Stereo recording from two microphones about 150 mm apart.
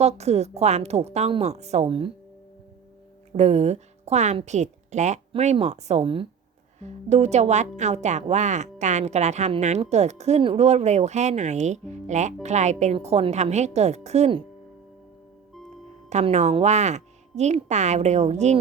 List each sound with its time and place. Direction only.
0.0 s a woman's voice: 45° right (ahead or behind)
3.3 s a woman's voice: 45° right (ahead or behind)
16.0 s a woman's voice: 50° right (ahead or behind)